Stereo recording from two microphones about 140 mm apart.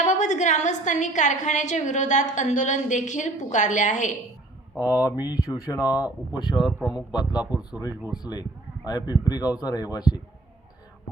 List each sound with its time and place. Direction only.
0.0 s a woman's voice: 60° left (ahead or behind)
4.8 s a man's voice: 25° left (ahead or behind)
6.6 s speech: 5° right (ahead or behind)
8.2 s a man's voice: 30° left (ahead or behind)